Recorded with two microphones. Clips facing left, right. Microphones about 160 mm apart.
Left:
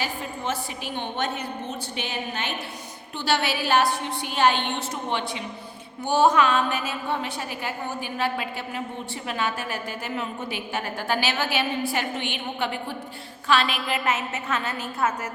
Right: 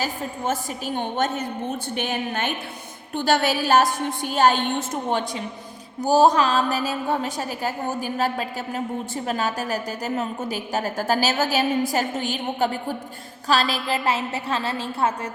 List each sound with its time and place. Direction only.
0.0 s a woman's voice: 45° right (ahead or behind)